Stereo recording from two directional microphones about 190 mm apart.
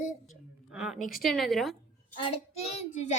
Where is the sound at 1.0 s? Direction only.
45° left (ahead or behind).